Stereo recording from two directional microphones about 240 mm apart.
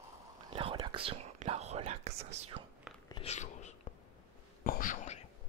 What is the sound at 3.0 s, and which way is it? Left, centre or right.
Whispering, left.